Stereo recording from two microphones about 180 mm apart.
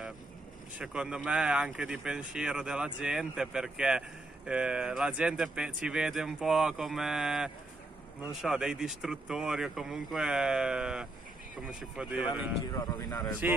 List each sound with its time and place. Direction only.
0.7 s speech: 5° right (ahead or behind)
12.6 s speech: 20° left (ahead or behind)